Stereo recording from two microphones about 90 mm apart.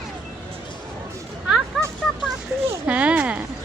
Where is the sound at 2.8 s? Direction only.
15° right (ahead or behind).